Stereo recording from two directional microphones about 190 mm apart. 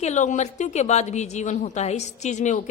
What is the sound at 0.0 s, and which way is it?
A woman's voice, 40° left (ahead or behind).